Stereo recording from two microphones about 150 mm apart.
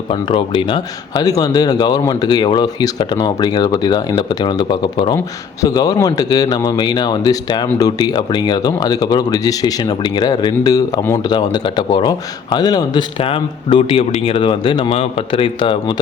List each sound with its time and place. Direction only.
0.1 s a man's voice: 35° left (ahead or behind)